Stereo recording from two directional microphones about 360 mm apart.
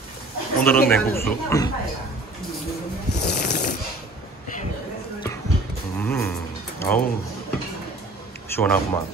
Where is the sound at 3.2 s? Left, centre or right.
Centre.